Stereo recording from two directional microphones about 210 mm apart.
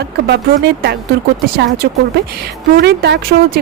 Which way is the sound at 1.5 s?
50° right (ahead or behind).